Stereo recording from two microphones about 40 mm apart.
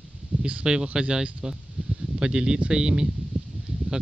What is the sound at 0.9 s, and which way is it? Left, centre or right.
Speech, right.